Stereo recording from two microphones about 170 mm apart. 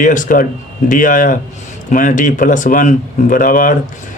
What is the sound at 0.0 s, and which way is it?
Speech, 50° left (ahead or behind).